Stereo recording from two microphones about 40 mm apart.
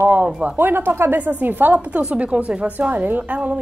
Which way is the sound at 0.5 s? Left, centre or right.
Right.